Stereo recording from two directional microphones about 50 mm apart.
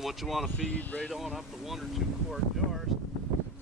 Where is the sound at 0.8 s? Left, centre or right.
Left.